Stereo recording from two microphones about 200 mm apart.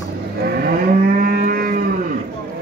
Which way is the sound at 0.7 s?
45° right (ahead or behind).